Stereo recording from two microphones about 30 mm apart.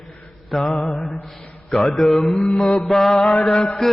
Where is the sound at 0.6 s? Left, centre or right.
Centre.